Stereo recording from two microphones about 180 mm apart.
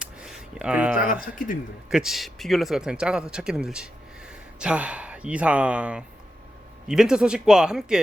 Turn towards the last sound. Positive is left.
turn(degrees=-5)  # may be behind; listen again after turning